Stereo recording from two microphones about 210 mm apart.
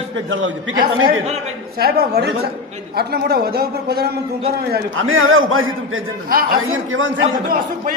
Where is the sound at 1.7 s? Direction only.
50° right (ahead or behind).